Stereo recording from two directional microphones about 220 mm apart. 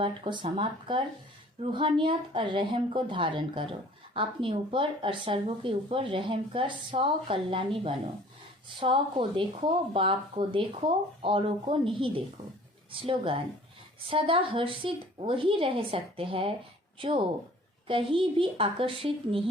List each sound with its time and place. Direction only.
0.0 s speech: 20° right (ahead or behind)
17.8 s speech: 25° right (ahead or behind)